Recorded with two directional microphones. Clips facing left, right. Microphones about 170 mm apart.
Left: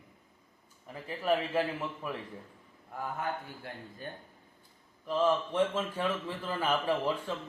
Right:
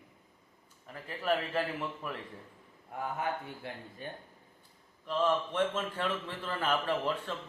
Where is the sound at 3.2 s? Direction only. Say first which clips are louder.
Right 1 dB; 25° right (ahead or behind).